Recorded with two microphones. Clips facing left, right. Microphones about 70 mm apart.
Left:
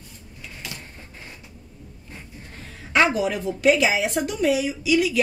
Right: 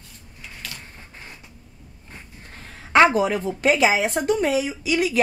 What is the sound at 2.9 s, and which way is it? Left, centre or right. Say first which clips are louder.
A woman's voice: right 4 dB; right.